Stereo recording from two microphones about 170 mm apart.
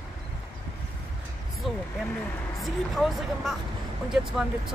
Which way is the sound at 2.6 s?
Centre (ahead or behind).